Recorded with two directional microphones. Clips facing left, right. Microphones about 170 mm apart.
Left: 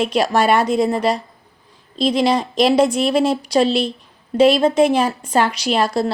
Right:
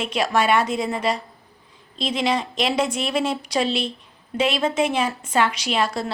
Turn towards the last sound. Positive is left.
turn(degrees=35)  # may be behind; listen again after turning